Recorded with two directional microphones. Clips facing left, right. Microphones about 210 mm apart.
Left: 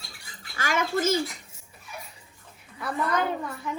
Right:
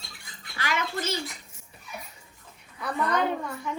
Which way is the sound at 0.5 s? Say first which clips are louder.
Left 4 dB; 45° left (ahead or behind).